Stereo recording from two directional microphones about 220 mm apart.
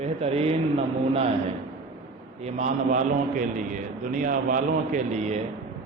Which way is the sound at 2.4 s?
30° right (ahead or behind).